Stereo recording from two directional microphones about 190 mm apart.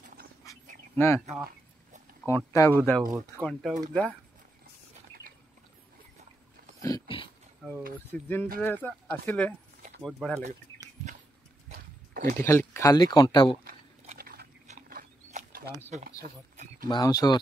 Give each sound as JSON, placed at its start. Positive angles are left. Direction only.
{"t": 0.9, "sound": "speech", "side_deg": 15}
{"t": 2.2, "sound": "speech", "side_deg": 15}
{"t": 3.2, "sound": "speech", "side_deg": 0}
{"t": 6.8, "sound": "dog", "side_deg": 25}
{"t": 7.6, "sound": "speech", "side_deg": 0}
{"t": 11.7, "sound": "horse", "side_deg": -50}
{"t": 12.4, "sound": "speech", "side_deg": 15}
{"t": 13.7, "sound": "horse", "side_deg": -50}
{"t": 14.7, "sound": "a sound", "side_deg": -45}
{"t": 15.9, "sound": "speech", "side_deg": -40}
{"t": 16.8, "sound": "speech", "side_deg": 20}